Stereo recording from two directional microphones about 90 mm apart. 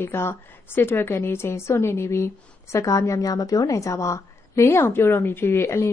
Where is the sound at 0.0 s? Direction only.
30° left (ahead or behind).